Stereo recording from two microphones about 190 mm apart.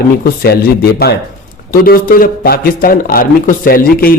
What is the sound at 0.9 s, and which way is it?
A man's voice, 55° left (ahead or behind).